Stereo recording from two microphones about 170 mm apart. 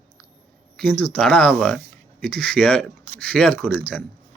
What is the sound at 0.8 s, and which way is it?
Speech, 10° left (ahead or behind).